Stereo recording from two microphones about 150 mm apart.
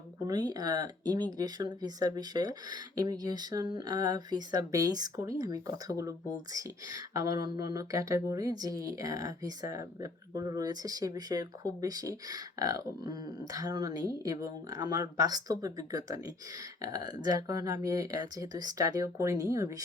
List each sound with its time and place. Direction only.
0.3 s speech: 25° right (ahead or behind)